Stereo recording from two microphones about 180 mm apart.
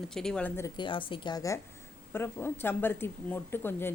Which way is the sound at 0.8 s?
25° left (ahead or behind).